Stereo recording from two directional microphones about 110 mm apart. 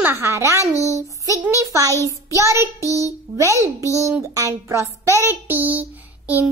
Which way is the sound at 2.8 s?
30° left (ahead or behind).